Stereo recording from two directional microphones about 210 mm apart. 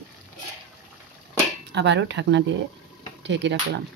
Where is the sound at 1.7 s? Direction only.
55° right (ahead or behind).